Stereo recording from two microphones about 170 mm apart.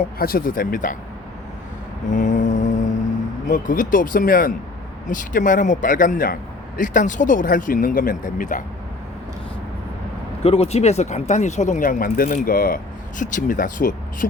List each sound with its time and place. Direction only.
0.2 s speech: 60° left (ahead or behind)
2.0 s mantra: 45° left (ahead or behind)
3.4 s speech: 50° left (ahead or behind)
10.4 s speech: 35° left (ahead or behind); by 14.3 s 50° left (ahead or behind)